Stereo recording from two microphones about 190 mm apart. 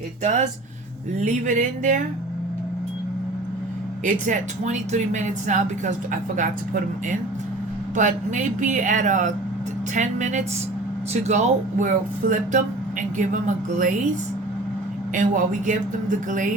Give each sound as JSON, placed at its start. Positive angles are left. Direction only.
{"t": 0.2, "sound": "speech", "side_deg": -40}
{"t": 4.0, "sound": "speech", "side_deg": -40}
{"t": 7.9, "sound": "speech", "side_deg": -40}
{"t": 15.1, "sound": "speech", "side_deg": -45}